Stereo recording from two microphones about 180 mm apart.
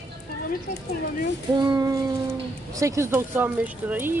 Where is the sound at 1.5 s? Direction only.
25° right (ahead or behind).